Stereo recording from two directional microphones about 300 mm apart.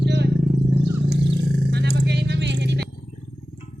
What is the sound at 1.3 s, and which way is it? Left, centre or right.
Roaring cats, right.